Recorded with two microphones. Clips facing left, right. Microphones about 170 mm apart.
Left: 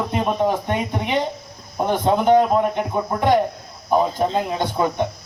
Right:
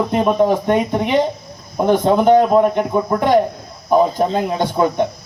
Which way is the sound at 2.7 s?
55° right (ahead or behind).